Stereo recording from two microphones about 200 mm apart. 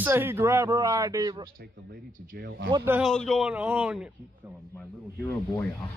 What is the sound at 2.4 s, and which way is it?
Speech, 50° right (ahead or behind).